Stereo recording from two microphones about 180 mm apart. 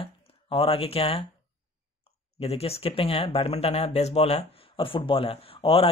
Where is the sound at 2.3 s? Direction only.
35° left (ahead or behind).